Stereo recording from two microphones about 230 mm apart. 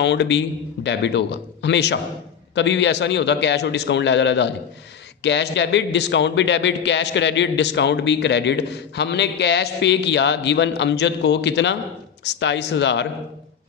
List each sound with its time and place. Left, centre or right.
0.0 s a man's voice: left